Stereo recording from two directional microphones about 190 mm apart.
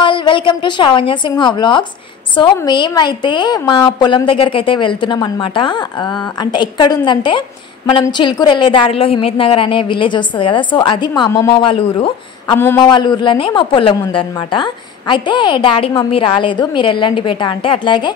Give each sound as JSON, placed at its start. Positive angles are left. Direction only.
{"t": 0.0, "sound": "a woman's voice", "side_deg": 25}
{"t": 12.5, "sound": "a man's voice", "side_deg": 10}
{"t": 12.9, "sound": "a woman's voice", "side_deg": 25}